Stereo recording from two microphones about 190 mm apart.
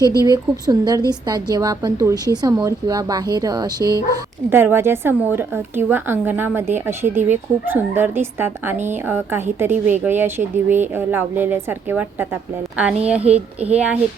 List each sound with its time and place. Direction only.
0.3 s a woman's voice: 20° right (ahead or behind)
13.3 s a child's voice: 35° right (ahead or behind)
13.6 s a woman's voice: 5° right (ahead or behind)